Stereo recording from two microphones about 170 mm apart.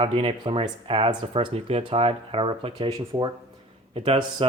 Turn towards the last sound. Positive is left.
turn(degrees=-35)  # may be behind; listen again after turning